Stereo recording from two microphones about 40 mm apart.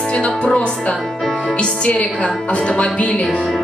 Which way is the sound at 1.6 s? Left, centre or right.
Left.